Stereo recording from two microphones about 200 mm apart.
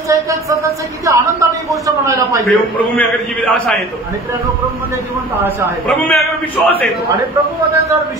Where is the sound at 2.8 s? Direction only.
10° left (ahead or behind).